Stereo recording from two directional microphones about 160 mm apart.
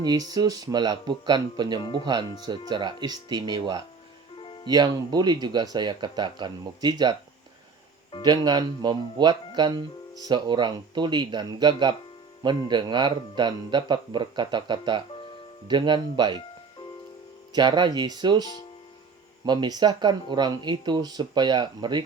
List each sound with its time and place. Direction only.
0.0 s speech: 25° right (ahead or behind)
4.4 s music: 35° left (ahead or behind)
4.6 s speech: 25° right (ahead or behind)
8.2 s speech: 25° right (ahead or behind)
17.5 s speech: 30° right (ahead or behind)
19.5 s speech: 25° right (ahead or behind)